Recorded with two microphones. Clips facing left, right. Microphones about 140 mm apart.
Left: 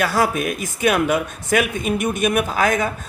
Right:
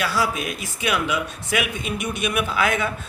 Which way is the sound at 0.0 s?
50° left (ahead or behind).